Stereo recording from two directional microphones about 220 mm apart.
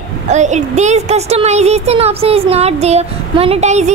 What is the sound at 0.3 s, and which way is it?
A woman's voice, 30° right (ahead or behind).